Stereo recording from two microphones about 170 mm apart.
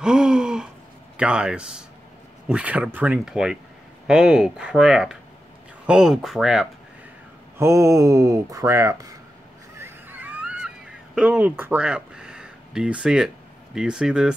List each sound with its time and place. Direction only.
0.0 s gasp: 5° right (ahead or behind)
1.1 s speech: 5° right (ahead or behind)
7.5 s speech: 15° right (ahead or behind)
9.8 s a sound: 15° right (ahead or behind)
11.1 s speech: 5° right (ahead or behind)